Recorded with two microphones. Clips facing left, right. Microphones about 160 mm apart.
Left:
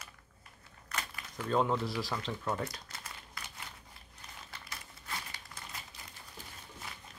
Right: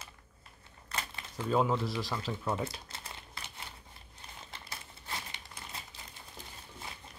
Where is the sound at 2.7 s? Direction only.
25° right (ahead or behind).